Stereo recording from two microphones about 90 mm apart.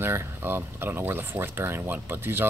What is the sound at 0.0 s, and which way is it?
Speech, 25° right (ahead or behind).